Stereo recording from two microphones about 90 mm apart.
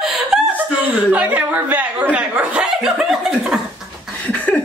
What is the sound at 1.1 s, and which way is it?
Chuckle, 20° right (ahead or behind).